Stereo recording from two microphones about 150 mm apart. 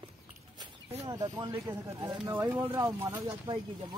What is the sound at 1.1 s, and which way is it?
Speech, 25° right (ahead or behind).